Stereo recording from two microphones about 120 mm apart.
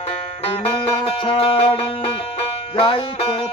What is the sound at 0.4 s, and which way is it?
Music, 55° left (ahead or behind).